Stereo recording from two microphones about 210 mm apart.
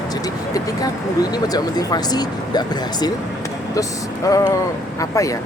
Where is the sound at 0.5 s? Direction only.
15° left (ahead or behind).